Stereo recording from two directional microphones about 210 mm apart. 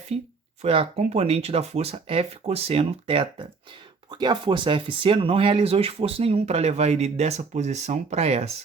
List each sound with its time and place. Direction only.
0.1 s speech: 25° right (ahead or behind)